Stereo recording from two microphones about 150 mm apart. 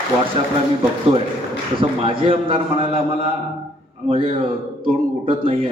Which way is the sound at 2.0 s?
35° right (ahead or behind).